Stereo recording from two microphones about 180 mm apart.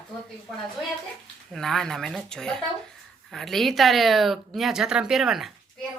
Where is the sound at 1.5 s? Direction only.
Centre (ahead or behind).